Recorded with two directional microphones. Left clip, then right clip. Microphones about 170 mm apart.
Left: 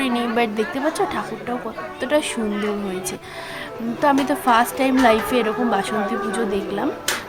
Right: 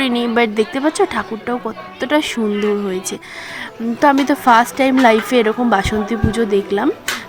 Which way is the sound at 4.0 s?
40° right (ahead or behind).